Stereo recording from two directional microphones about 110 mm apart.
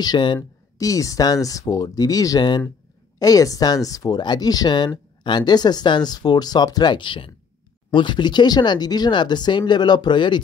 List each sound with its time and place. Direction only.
0.0 s speech: 45° left (ahead or behind)
0.7 s speech: 30° left (ahead or behind)